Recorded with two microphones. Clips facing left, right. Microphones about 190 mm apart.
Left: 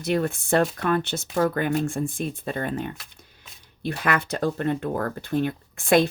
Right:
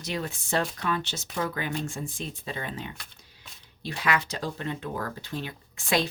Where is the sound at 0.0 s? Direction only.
55° left (ahead or behind).